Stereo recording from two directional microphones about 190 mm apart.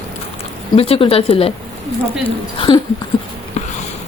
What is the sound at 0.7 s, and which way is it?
Speech, 30° left (ahead or behind).